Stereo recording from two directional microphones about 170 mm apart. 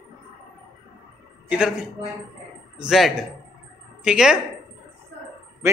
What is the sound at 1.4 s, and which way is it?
Speech, 5° right (ahead or behind).